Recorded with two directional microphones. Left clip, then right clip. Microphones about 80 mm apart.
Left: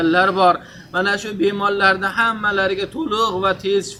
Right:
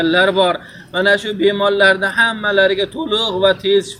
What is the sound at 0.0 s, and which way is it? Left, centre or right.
A man's voice, left.